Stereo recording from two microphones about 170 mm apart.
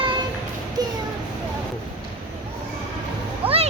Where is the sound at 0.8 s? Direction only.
25° right (ahead or behind).